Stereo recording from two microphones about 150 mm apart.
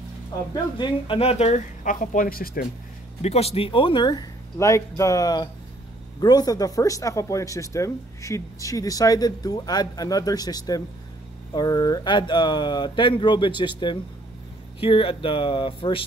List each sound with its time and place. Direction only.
0.7 s speech: 35° left (ahead or behind)
1.9 s speech: 65° left (ahead or behind)
3.2 s speech: 45° left (ahead or behind)
4.6 s speech: 20° left (ahead or behind); by 16.0 s 35° left (ahead or behind)